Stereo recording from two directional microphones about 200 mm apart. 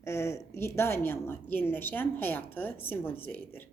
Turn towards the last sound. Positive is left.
turn(degrees=10)  # may be behind; listen again after turning